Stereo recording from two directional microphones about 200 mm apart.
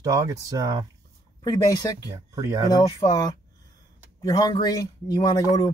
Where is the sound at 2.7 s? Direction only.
20° left (ahead or behind).